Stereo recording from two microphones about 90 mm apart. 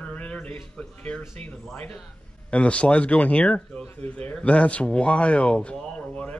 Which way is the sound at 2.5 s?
15° left (ahead or behind).